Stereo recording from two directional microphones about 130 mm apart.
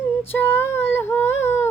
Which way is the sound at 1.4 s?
20° left (ahead or behind).